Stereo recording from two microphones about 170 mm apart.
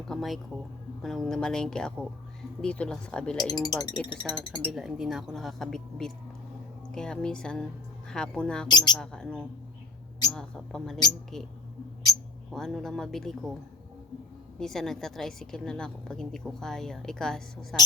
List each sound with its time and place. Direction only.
0.1 s a woman's voice: centre (ahead or behind)
3.3 s speech: 20° left (ahead or behind)
4.2 s a woman's voice: 5° left (ahead or behind)
8.6 s speech: 25° left (ahead or behind)
9.0 s a woman's voice: 5° left (ahead or behind)
14.6 s a woman's voice: centre (ahead or behind)